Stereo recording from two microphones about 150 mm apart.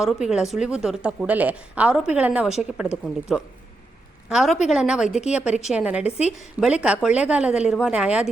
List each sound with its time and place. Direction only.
0.0 s a woman's voice: 5° right (ahead or behind)
6.1 s a woman's voice: 45° left (ahead or behind)
6.8 s a woman's voice: 5° right (ahead or behind)